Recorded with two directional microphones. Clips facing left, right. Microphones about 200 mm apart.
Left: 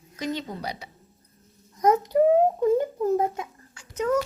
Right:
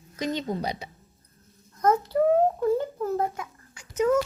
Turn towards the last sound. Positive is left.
turn(degrees=-10)  # may be behind; listen again after turning